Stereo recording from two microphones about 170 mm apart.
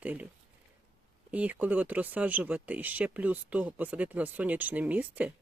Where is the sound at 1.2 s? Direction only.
10° right (ahead or behind).